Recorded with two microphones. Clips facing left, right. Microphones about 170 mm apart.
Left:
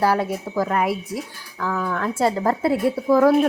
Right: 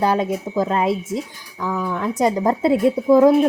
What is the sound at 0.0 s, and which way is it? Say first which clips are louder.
A woman's voice: right 1 dB; 20° right (ahead or behind).